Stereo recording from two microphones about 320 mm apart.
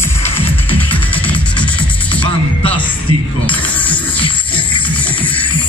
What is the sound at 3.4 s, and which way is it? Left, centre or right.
Music, centre.